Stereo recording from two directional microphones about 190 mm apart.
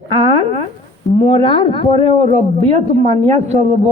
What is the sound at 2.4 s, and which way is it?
A woman's voice, 35° right (ahead or behind).